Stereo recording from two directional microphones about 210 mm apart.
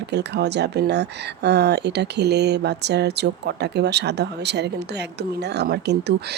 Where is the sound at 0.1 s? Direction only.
55° right (ahead or behind).